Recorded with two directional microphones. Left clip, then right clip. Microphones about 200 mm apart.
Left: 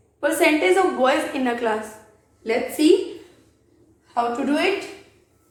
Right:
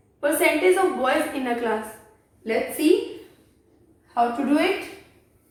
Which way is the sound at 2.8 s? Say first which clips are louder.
Left 4 dB; 45° left (ahead or behind).